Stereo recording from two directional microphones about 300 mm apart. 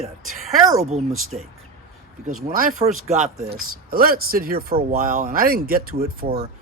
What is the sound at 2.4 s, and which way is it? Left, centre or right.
Speech, right.